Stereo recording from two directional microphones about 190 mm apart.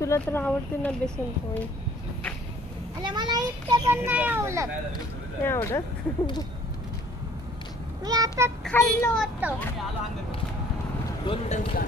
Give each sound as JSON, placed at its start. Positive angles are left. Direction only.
{"t": 0.0, "sound": "speech", "side_deg": 15}
{"t": 3.0, "sound": "a sound", "side_deg": -25}
{"t": 3.9, "sound": "a child's voice", "side_deg": -10}
{"t": 5.4, "sound": "speech", "side_deg": 15}
{"t": 8.0, "sound": "a child's voice", "side_deg": -20}
{"t": 8.6, "sound": "speech", "side_deg": 15}
{"t": 9.4, "sound": "a child's voice", "side_deg": -10}
{"t": 11.2, "sound": "speech", "side_deg": 40}